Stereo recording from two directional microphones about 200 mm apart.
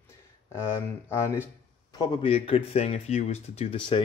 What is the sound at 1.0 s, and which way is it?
Speech, 15° left (ahead or behind).